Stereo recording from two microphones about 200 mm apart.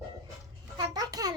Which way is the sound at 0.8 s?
20° right (ahead or behind).